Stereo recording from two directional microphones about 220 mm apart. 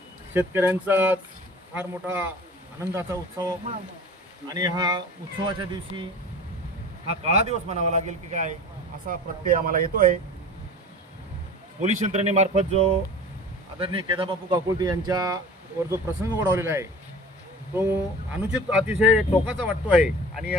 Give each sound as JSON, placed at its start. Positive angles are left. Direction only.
{"t": 0.3, "sound": "speech", "side_deg": -10}
{"t": 7.1, "sound": "speech", "side_deg": -30}
{"t": 9.6, "sound": "speech", "side_deg": -40}
{"t": 11.8, "sound": "speech", "side_deg": -30}